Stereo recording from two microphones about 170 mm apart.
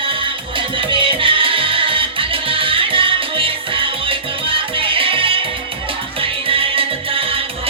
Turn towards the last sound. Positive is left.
turn(degrees=-30)  # may be behind; listen again after turning